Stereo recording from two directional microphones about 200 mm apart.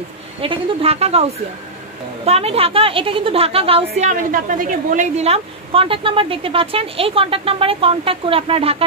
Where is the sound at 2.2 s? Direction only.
30° right (ahead or behind).